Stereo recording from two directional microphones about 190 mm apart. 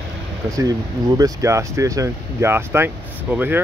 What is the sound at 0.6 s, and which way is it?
Speech, 20° right (ahead or behind).